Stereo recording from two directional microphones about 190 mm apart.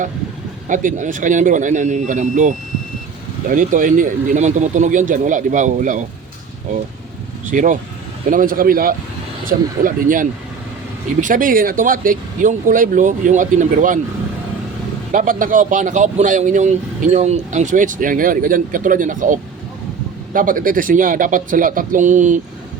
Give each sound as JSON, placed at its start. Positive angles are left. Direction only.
{"t": 0.7, "sound": "a man's voice", "side_deg": -45}
{"t": 7.5, "sound": "speech", "side_deg": -45}
{"t": 15.1, "sound": "speech", "side_deg": -45}